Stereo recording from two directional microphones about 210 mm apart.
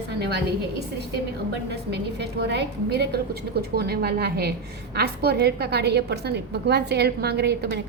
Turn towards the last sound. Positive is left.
turn(degrees=-50)  # may be behind; listen again after turning